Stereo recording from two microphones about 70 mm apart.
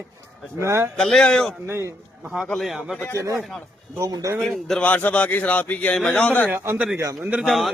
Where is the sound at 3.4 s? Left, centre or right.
Centre.